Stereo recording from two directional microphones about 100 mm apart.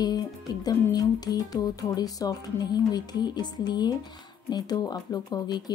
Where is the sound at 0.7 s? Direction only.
40° left (ahead or behind).